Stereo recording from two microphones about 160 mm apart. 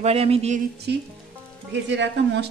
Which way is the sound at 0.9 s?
90° right.